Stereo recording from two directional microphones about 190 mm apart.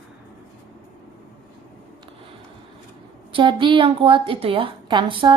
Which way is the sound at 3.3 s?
25° right (ahead or behind).